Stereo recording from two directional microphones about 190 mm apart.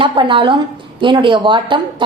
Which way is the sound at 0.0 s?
25° right (ahead or behind).